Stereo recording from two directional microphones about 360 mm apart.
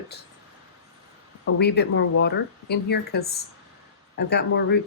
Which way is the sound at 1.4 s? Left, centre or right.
Left.